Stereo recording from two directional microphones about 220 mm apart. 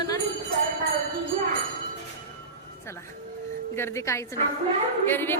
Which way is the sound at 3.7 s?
10° left (ahead or behind).